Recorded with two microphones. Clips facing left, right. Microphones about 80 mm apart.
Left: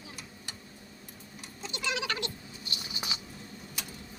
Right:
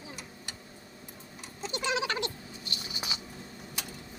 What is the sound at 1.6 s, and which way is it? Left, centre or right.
Cat, right.